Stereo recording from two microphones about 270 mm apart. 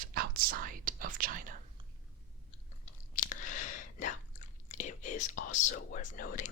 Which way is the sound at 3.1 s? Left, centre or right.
Left.